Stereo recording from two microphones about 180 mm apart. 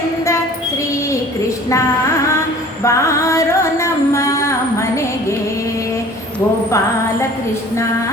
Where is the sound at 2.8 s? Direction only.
15° left (ahead or behind).